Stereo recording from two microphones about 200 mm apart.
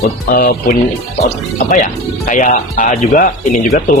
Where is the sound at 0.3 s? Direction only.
45° left (ahead or behind).